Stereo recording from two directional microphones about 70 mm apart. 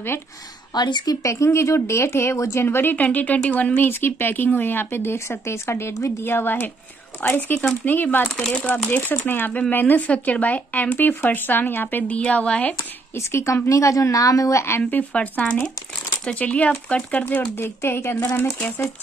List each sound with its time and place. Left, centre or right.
0.7 s speech: left
1.2 s speech: left
6.2 s speech: left
8.4 s speech: centre
9.2 s speech: left
13.1 s a woman's voice: left
14.8 s speech: left